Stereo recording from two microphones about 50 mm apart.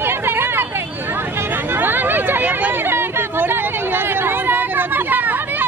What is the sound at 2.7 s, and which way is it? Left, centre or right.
Hubbub, right.